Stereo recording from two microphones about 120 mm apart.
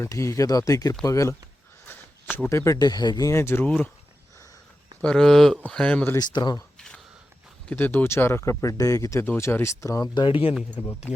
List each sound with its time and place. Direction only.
0.0 s speech: 25° left (ahead or behind)
1.9 s a sound: 20° left (ahead or behind)
2.3 s speech: 20° left (ahead or behind)
2.7 s speech: 35° left (ahead or behind); by 3.9 s 10° left (ahead or behind)
5.0 s speech: 5° left (ahead or behind)
6.1 s speech: 35° left (ahead or behind)
6.7 s a sound: 5° left (ahead or behind)
7.7 s speech: 15° left (ahead or behind)
10.2 s speech: 45° left (ahead or behind)
10.8 s speech: 60° left (ahead or behind)